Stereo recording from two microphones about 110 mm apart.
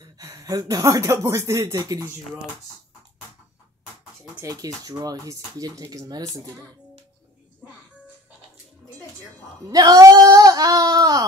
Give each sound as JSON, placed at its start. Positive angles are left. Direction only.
{"t": 0.0, "sound": "speech", "side_deg": -30}
{"t": 4.4, "sound": "speech", "side_deg": -35}
{"t": 9.7, "sound": "speech", "side_deg": -35}